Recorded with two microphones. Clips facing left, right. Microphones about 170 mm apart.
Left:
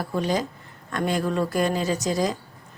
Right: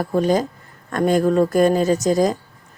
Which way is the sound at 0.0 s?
45° right (ahead or behind).